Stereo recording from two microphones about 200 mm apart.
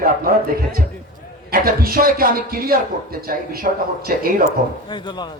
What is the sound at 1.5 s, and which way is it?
A man's voice, 45° right (ahead or behind).